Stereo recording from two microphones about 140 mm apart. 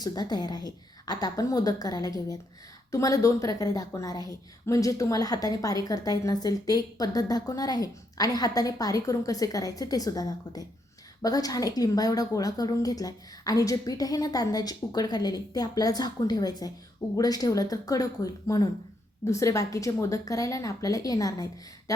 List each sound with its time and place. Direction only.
0.0 s a woman's voice: 30° left (ahead or behind)